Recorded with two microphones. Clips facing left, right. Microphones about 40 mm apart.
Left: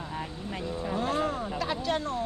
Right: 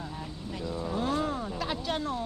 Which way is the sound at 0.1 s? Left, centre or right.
Left.